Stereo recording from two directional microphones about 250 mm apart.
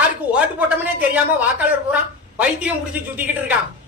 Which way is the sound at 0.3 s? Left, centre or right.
Centre.